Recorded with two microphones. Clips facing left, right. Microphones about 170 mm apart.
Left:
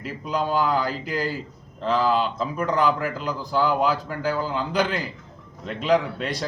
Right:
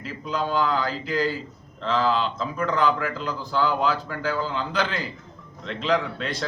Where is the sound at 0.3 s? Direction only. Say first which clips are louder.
Left 1 dB; 10° left (ahead or behind).